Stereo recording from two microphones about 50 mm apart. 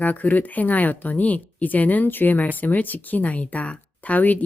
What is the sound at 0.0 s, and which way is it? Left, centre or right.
Speech, left.